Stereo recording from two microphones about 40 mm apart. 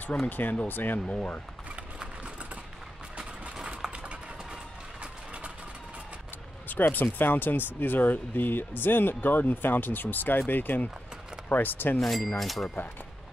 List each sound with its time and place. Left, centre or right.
0.3 s speech: left
1.0 s speech: left
6.7 s speech: left
12.0 s speech: centre